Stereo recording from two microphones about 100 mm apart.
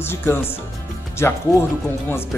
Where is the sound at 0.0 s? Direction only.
25° left (ahead or behind).